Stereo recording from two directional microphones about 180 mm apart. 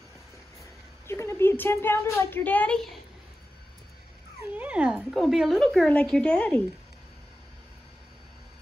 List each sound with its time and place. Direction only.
1.0 s speech: 15° left (ahead or behind)
4.6 s speech: 5° right (ahead or behind)